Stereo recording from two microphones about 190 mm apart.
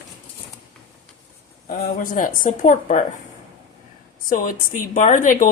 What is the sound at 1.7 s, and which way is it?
A woman's voice, 45° left (ahead or behind).